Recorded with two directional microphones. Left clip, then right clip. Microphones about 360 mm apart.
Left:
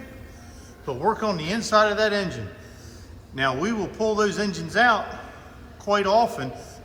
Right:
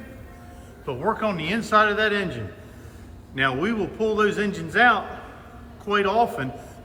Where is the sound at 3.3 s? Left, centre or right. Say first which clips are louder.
Right 1 dB; centre.